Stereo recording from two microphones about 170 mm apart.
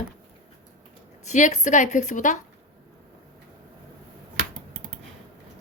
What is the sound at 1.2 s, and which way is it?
Speech, 45° left (ahead or behind).